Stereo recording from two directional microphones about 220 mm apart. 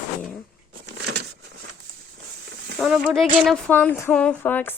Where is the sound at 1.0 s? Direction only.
50° right (ahead or behind).